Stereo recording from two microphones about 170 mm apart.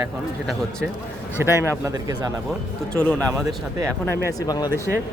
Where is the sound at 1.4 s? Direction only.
15° right (ahead or behind).